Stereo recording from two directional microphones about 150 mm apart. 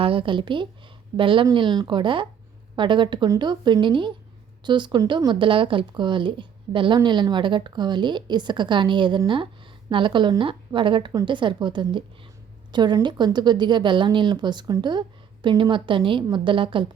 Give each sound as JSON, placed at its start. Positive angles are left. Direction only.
{"t": 0.0, "sound": "speech", "side_deg": -35}